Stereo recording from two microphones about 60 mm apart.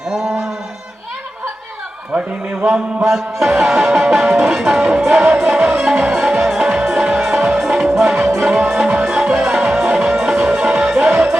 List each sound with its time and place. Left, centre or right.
0.1 s music: centre
2.1 s a man's voice: right
3.1 s music: centre